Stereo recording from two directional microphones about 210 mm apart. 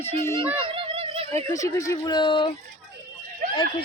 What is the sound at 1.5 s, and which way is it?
Speech, 15° left (ahead or behind).